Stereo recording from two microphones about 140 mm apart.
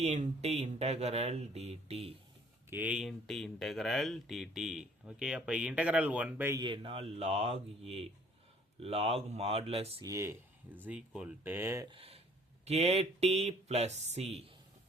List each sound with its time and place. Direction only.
0.0 s speech: 50° right (ahead or behind)
2.6 s speech: 10° right (ahead or behind)
6.6 s speech: 40° right (ahead or behind)
10.0 s speech: 20° right (ahead or behind)
11.9 s speech: 45° right (ahead or behind)